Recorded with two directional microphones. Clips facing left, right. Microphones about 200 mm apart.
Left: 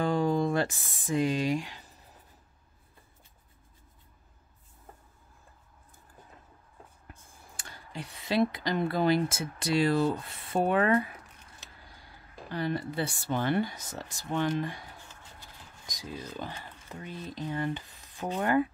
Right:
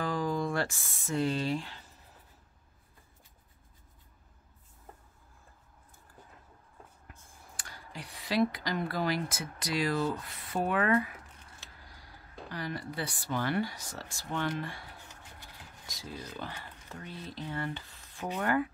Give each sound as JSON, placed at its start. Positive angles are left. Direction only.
{"t": 0.0, "sound": "speech", "side_deg": 25}
{"t": 7.5, "sound": "speech", "side_deg": 25}
{"t": 12.4, "sound": "speech", "side_deg": 25}
{"t": 15.9, "sound": "speech", "side_deg": 15}